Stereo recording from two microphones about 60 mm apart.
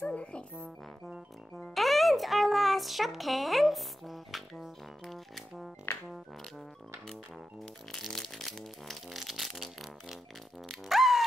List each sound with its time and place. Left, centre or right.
0.1 s a child's voice: centre
1.7 s a child's voice: centre
7.6 s a child's voice: centre